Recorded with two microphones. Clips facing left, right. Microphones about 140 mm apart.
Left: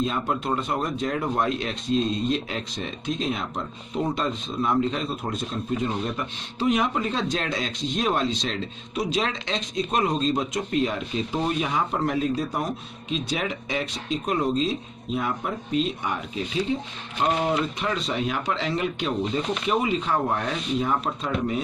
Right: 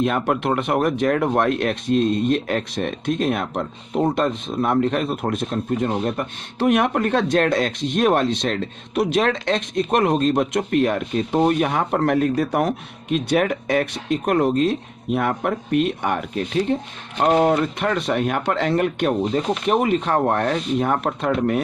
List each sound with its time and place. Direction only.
0.0 s speech: 65° right (ahead or behind)